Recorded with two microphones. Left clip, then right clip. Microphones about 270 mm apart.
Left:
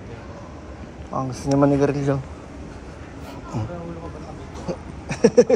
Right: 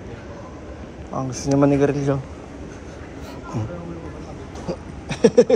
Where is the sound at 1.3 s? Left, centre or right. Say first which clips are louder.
Right 1 dB; centre.